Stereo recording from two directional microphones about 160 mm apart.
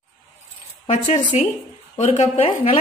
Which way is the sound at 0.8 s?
50° left (ahead or behind).